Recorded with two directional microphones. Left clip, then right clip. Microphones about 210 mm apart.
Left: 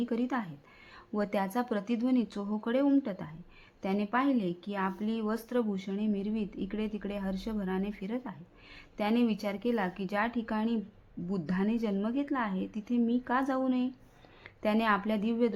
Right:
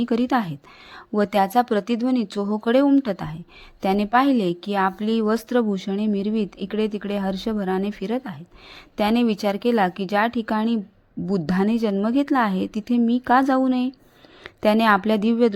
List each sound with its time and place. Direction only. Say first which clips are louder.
0.0 s a woman's voice: right 12 dB; 35° right (ahead or behind)